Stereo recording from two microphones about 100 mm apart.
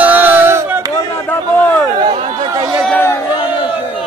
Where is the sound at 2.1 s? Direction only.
80° right.